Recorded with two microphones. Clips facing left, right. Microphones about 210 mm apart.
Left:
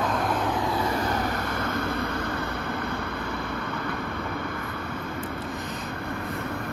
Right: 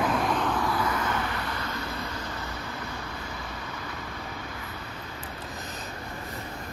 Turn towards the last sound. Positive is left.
turn(degrees=60)  # may be behind; listen again after turning